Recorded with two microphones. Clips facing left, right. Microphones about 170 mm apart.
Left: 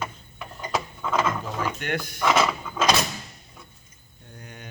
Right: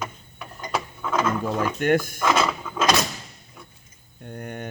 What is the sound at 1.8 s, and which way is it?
Speech, 45° right (ahead or behind).